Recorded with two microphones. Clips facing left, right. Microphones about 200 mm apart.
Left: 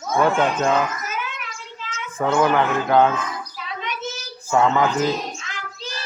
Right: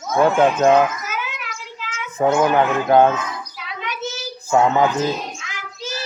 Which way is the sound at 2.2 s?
25° right (ahead or behind).